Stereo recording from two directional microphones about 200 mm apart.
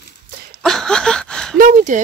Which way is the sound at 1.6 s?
40° right (ahead or behind).